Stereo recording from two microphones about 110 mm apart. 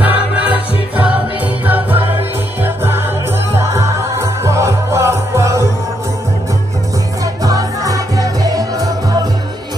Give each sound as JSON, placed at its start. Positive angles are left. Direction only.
{"t": 0.0, "sound": "music", "side_deg": -15}
{"t": 7.4, "sound": "music", "side_deg": -30}